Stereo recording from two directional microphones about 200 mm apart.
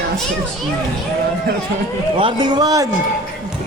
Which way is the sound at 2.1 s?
25° right (ahead or behind).